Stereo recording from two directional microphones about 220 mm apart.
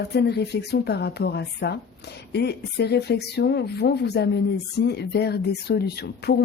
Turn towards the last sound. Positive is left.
turn(degrees=45)  # may be behind; listen again after turning